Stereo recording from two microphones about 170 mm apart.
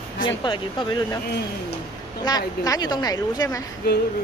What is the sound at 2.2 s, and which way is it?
A woman's voice, 20° left (ahead or behind).